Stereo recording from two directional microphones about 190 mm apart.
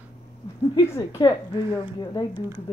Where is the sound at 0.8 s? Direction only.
15° left (ahead or behind).